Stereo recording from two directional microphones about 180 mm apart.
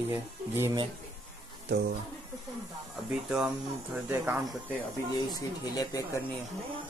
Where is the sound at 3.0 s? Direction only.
5° right (ahead or behind).